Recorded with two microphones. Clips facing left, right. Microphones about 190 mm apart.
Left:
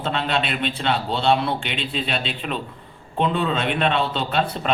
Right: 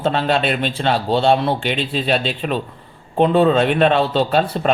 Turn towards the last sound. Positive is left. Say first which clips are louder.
# right 5 dB
turn(degrees=-40)  # may be behind; listen again after turning